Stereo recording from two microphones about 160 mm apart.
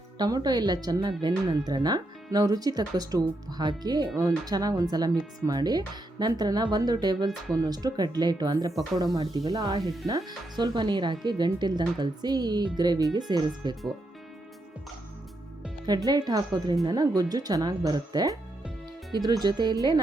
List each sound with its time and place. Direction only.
0.2 s speech: 25° right (ahead or behind)
16.0 s speech: 25° right (ahead or behind)